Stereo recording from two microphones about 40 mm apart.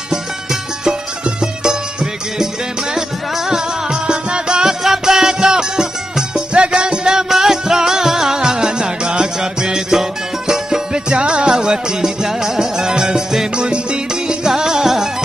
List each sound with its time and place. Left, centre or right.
0.1 s music: centre
3.4 s music: centre
4.8 s music: centre